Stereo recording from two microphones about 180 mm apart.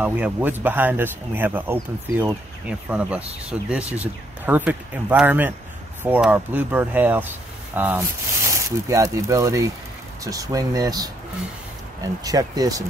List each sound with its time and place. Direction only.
0.0 s speech: 10° right (ahead or behind)